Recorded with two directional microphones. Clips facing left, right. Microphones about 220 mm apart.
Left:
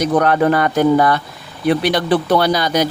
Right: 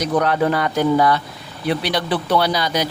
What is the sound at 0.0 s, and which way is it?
Speech, 55° left (ahead or behind).